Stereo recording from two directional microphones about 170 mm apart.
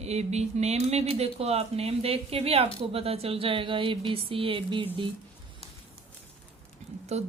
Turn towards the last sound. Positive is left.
turn(degrees=-40)  # may be behind; listen again after turning